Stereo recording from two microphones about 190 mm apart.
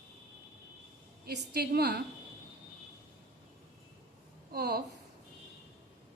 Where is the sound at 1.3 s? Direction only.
55° right (ahead or behind).